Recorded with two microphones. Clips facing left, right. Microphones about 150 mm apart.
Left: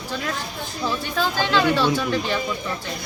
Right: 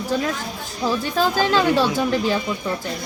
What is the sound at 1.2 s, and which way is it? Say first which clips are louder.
Speech: right 2 dB; 40° right (ahead or behind).